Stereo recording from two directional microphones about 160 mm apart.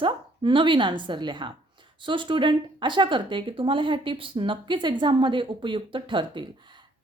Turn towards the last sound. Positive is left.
turn(degrees=-30)  # may be behind; listen again after turning